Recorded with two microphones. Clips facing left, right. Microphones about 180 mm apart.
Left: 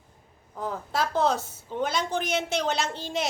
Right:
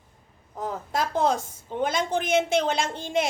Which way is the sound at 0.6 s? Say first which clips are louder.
Right 1 dB; 45° right (ahead or behind).